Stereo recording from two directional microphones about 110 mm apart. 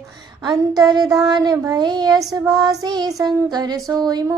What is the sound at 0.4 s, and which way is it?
Child singing, 40° right (ahead or behind).